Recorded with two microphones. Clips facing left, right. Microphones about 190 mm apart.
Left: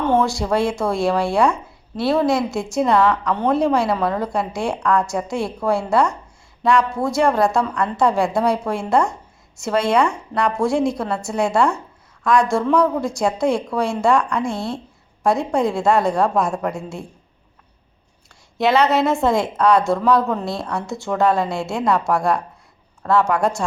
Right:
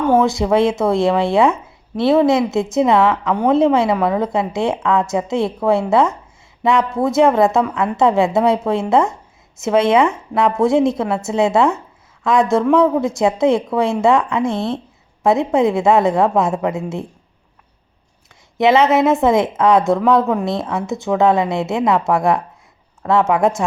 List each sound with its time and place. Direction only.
0.2 s a woman's voice: 20° right (ahead or behind)
3.8 s a woman's voice: 5° right (ahead or behind)
4.2 s a woman's voice: 20° right (ahead or behind)
18.5 s a woman's voice: 20° right (ahead or behind)